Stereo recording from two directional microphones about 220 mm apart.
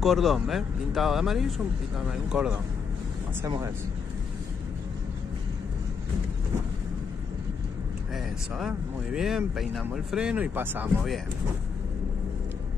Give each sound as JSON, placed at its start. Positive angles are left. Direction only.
{"t": 0.0, "sound": "speech", "side_deg": 0}
{"t": 3.4, "sound": "speech", "side_deg": -15}
{"t": 8.1, "sound": "speech", "side_deg": 0}